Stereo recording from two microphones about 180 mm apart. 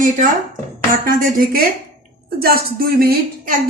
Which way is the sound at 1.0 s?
50° right (ahead or behind).